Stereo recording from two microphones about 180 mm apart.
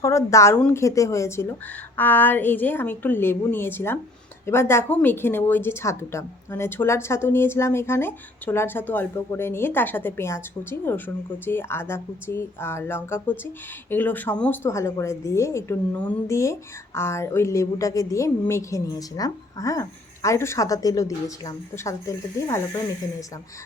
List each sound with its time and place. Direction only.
0.0 s a woman's voice: 15° left (ahead or behind)